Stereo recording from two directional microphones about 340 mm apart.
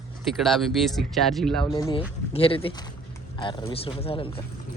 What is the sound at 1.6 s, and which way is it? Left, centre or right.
Speech, centre.